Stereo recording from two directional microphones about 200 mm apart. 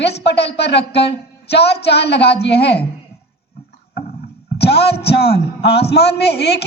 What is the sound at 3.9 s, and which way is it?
A man's voice, 50° left (ahead or behind).